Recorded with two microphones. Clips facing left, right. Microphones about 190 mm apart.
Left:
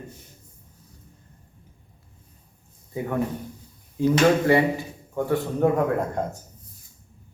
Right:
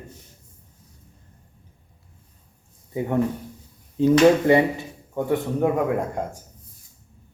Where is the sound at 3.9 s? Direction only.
20° right (ahead or behind).